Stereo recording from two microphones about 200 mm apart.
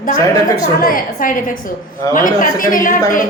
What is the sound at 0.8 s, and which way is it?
A woman's voice, 45° left (ahead or behind).